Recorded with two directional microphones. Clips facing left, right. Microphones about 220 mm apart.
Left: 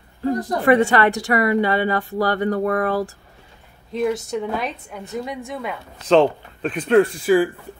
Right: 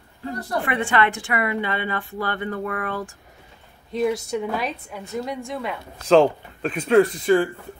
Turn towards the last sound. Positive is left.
turn(degrees=5)  # may be behind; listen again after turning